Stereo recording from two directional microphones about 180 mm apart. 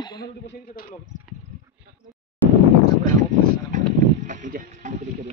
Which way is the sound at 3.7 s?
45° right (ahead or behind).